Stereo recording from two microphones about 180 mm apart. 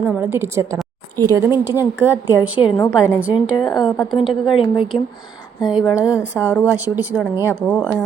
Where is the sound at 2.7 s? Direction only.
20° left (ahead or behind).